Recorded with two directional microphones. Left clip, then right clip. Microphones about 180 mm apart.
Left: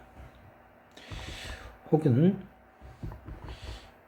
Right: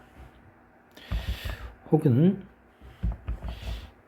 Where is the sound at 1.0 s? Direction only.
20° right (ahead or behind).